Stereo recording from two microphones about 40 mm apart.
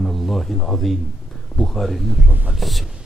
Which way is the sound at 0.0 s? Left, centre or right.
Centre.